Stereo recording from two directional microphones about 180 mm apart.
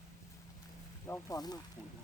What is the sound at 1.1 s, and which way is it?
Speech, 20° left (ahead or behind).